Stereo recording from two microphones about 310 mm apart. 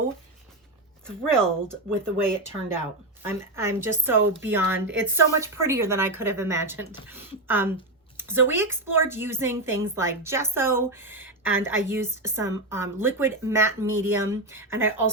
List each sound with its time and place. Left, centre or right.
1.0 s a woman's voice: centre